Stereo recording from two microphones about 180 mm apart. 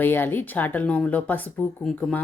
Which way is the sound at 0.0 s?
10° left (ahead or behind).